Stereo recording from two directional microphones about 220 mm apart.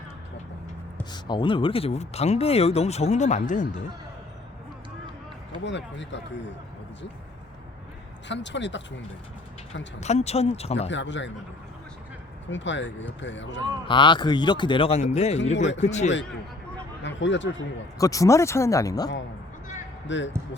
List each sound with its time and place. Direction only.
1.1 s speech: 20° left (ahead or behind)
5.6 s speech: 55° left (ahead or behind)
8.3 s speech: 55° left (ahead or behind)
10.0 s speech: 30° left (ahead or behind)
10.8 s speech: 55° left (ahead or behind)
12.5 s speech: 55° left (ahead or behind)
13.8 s a man's voice: 20° left (ahead or behind)
17.0 s speech: 55° left (ahead or behind)
17.9 s speech: 15° left (ahead or behind)
20.1 s speech: 55° left (ahead or behind)